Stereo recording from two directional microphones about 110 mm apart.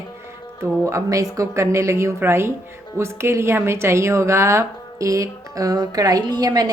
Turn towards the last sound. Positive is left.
turn(degrees=-35)  # may be behind; listen again after turning